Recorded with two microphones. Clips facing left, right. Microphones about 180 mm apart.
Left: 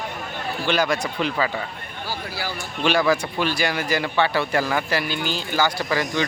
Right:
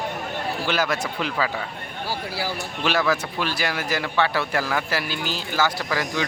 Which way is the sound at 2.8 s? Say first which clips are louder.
Left 3 dB; centre (ahead or behind).